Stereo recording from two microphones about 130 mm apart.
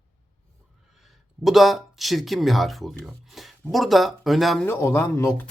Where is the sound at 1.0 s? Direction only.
Centre (ahead or behind).